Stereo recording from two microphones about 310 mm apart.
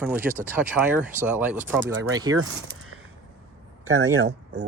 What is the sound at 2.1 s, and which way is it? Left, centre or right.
Speech, centre.